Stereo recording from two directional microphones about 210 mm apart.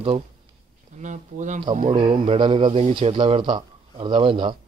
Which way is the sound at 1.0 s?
35° right (ahead or behind).